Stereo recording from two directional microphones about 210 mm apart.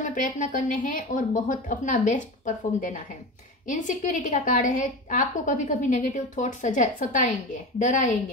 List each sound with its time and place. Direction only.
0.0 s a woman's voice: 40° left (ahead or behind)